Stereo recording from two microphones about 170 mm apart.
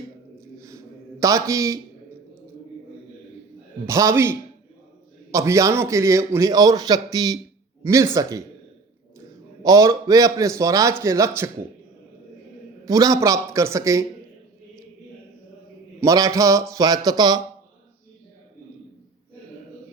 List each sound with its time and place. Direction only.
0.3 s a sound: 15° right (ahead or behind)
1.2 s a man's voice: 20° right (ahead or behind)
3.8 s a man's voice: 20° right (ahead or behind)
9.6 s a man's voice: 20° right (ahead or behind)
12.8 s a man's voice: 20° right (ahead or behind)
16.0 s a man's voice: 20° right (ahead or behind)